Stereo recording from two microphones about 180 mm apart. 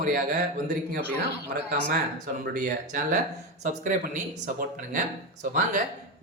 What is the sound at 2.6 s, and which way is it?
Speech, 45° right (ahead or behind).